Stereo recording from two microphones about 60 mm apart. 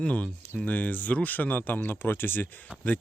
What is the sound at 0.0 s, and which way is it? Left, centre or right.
Speech, left.